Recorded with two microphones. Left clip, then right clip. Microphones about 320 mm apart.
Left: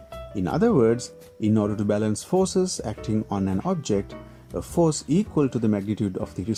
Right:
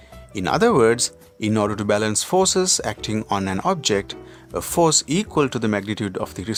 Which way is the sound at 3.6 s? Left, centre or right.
Right.